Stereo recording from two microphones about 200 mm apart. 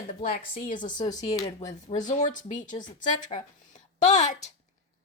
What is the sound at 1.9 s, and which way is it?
A woman's voice, 35° left (ahead or behind).